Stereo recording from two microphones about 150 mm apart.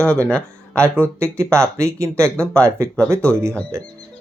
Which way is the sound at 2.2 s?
5° left (ahead or behind).